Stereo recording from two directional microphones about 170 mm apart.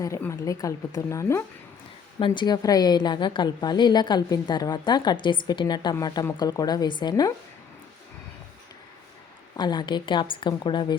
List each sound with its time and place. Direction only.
0.0 s speech: 15° left (ahead or behind)
2.1 s a woman's voice: 30° left (ahead or behind)
9.6 s a woman's voice: 25° left (ahead or behind)